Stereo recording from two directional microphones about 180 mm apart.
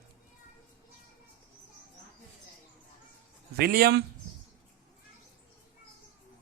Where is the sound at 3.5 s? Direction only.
60° right (ahead or behind).